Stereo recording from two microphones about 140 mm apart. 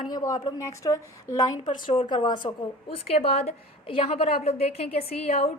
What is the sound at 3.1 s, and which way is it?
A woman's voice, 45° left (ahead or behind).